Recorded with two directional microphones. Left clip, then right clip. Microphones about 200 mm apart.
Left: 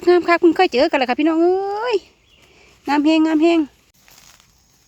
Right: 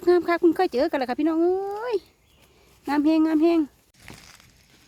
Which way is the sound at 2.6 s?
10° left (ahead or behind).